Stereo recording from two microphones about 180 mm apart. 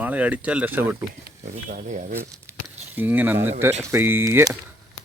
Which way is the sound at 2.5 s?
15° right (ahead or behind).